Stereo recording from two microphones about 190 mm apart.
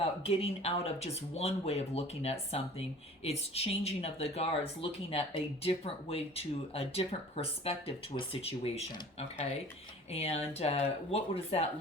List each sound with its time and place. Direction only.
0.0 s speech: 30° left (ahead or behind)